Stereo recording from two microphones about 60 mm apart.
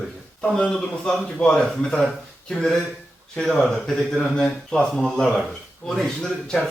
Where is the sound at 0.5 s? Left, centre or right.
Centre.